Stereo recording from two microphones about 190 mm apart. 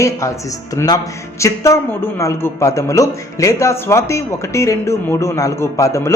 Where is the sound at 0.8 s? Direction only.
15° left (ahead or behind).